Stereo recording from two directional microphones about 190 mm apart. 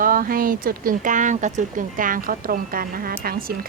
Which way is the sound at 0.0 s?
50° right (ahead or behind).